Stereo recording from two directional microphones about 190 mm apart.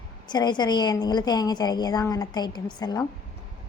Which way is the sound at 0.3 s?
20° left (ahead or behind).